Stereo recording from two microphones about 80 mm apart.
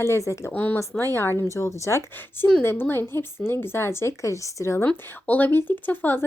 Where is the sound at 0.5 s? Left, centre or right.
Left.